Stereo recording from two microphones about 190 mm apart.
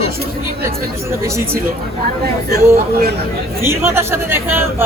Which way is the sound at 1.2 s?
15° right (ahead or behind).